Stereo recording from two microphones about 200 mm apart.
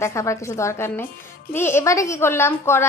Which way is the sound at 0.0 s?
15° left (ahead or behind).